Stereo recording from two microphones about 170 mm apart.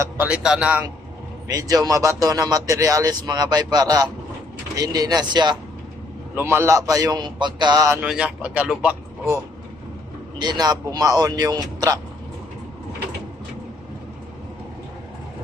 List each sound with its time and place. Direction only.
0.0 s a man's voice: 10° right (ahead or behind)
1.5 s speech: 20° right (ahead or behind)
6.3 s speech: 15° right (ahead or behind)
8.0 s a man's voice: 5° right (ahead or behind)
10.3 s speech: 25° right (ahead or behind)